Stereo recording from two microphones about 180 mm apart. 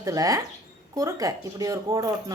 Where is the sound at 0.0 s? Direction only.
20° right (ahead or behind).